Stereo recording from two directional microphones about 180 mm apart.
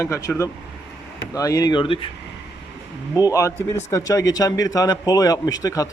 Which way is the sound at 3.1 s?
20° left (ahead or behind).